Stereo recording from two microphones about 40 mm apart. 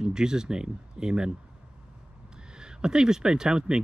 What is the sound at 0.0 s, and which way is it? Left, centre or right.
Speech, centre.